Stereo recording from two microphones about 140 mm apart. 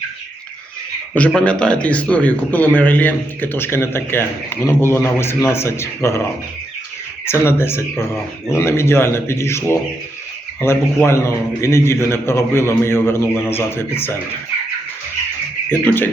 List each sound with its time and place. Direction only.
1.3 s a man's voice: 5° left (ahead or behind)
7.3 s a man's voice: 15° left (ahead or behind)
15.7 s a man's voice: 15° left (ahead or behind)